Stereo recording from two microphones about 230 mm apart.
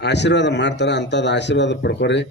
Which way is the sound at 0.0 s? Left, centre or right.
Left.